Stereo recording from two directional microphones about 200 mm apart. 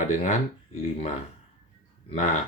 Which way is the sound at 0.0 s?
35° left (ahead or behind).